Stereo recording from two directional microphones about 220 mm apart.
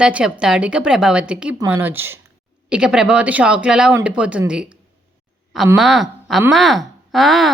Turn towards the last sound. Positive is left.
turn(degrees=0)  # may be behind; listen again after turning